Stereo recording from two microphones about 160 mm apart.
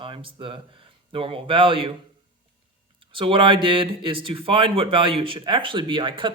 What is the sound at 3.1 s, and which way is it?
Speech, 30° right (ahead or behind).